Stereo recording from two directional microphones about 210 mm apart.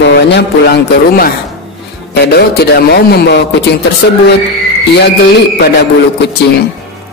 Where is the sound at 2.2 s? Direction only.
50° left (ahead or behind).